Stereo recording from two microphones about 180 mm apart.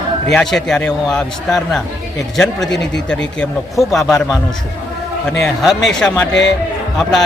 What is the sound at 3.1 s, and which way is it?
Speech, 5° left (ahead or behind).